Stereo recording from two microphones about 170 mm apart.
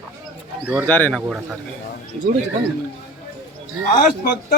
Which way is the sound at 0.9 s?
10° left (ahead or behind).